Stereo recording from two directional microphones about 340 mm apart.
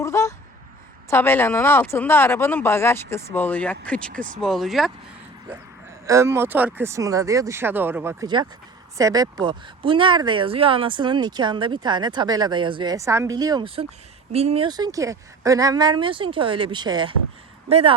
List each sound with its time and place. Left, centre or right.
0.0 s a sound: centre
1.1 s speech: centre
6.1 s speech: centre